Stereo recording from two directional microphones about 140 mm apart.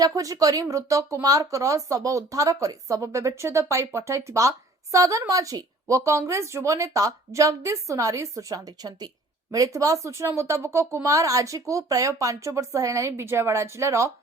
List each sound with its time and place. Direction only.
0.0 s speech: 25° right (ahead or behind)